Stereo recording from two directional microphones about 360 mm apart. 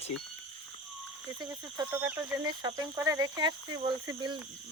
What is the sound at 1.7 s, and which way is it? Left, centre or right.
Speech, centre.